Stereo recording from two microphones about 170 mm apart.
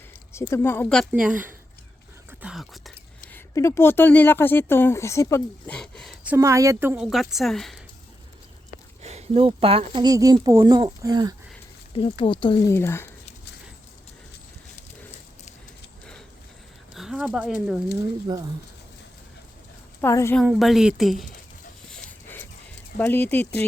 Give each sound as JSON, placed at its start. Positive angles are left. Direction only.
{"t": 0.3, "sound": "speech", "side_deg": 15}
{"t": 1.1, "sound": "speech", "side_deg": -5}
{"t": 2.4, "sound": "a sound", "side_deg": 0}
{"t": 3.3, "sound": "speech", "side_deg": 20}
{"t": 5.7, "sound": "a sound", "side_deg": 5}
{"t": 6.2, "sound": "a woman's voice", "side_deg": -15}
{"t": 9.0, "sound": "speech", "side_deg": -40}
{"t": 12.2, "sound": "speech", "side_deg": 30}
{"t": 12.6, "sound": "speech", "side_deg": 15}
{"t": 16.9, "sound": "speech", "side_deg": 0}
{"t": 18.3, "sound": "speech", "side_deg": -25}
{"t": 20.0, "sound": "speech", "side_deg": 15}
{"t": 20.4, "sound": "a woman's voice", "side_deg": 0}
{"t": 23.0, "sound": "speech", "side_deg": 10}